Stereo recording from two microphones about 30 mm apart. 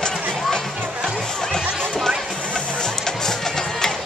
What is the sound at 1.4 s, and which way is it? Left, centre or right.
Music, centre.